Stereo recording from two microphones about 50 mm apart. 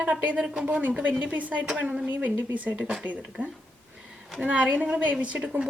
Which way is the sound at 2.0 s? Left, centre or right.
Right.